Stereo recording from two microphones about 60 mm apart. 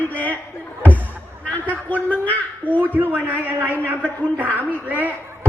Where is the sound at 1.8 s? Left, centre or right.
Left.